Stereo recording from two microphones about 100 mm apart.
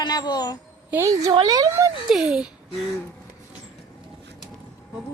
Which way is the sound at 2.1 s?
5° right (ahead or behind).